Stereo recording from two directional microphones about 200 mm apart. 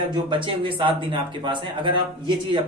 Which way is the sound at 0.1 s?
25° right (ahead or behind).